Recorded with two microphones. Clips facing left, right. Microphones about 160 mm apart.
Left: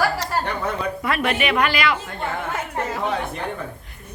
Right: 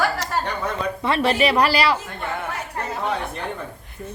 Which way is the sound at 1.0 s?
30° right (ahead or behind).